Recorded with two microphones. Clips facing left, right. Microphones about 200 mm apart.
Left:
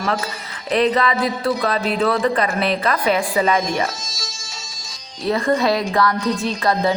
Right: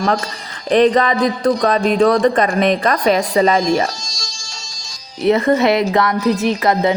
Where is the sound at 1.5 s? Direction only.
45° right (ahead or behind).